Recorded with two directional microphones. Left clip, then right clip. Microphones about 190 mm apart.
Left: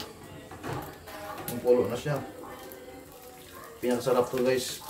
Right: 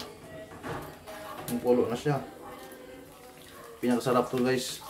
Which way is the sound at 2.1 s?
30° right (ahead or behind).